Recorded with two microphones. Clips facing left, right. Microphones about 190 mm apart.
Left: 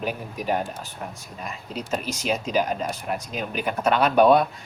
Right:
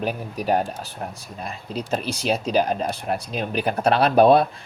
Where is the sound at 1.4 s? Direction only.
35° right (ahead or behind).